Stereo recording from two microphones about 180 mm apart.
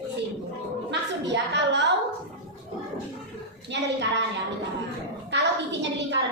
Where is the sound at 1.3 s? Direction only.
75° right (ahead or behind).